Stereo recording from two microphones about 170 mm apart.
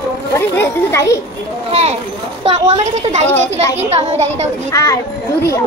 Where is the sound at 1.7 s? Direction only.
35° right (ahead or behind).